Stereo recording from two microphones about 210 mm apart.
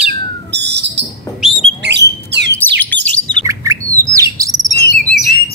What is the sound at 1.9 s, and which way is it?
Bird, 55° right (ahead or behind).